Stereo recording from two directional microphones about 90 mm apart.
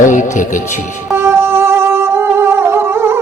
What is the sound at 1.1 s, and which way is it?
Music, 25° right (ahead or behind).